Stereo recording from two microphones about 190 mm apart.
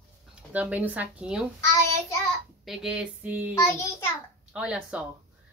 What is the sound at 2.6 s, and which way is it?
Speech, 5° right (ahead or behind).